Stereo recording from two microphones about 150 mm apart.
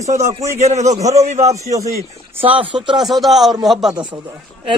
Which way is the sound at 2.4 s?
35° right (ahead or behind).